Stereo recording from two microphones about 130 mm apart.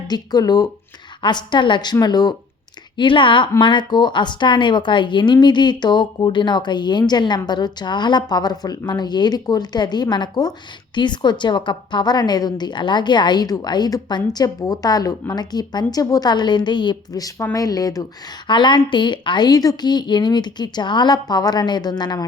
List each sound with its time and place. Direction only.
0.1 s a woman's voice: 30° left (ahead or behind)